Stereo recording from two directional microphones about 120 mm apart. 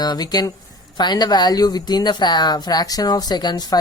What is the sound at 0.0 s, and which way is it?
Speech, 35° left (ahead or behind).